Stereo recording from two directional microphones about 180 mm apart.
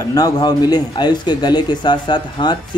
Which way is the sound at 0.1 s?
20° left (ahead or behind).